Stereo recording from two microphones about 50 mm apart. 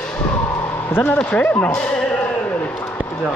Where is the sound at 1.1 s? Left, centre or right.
Left.